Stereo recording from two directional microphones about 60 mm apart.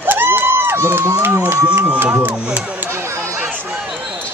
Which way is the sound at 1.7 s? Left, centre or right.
Right.